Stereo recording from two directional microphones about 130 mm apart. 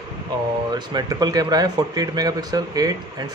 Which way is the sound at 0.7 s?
30° right (ahead or behind).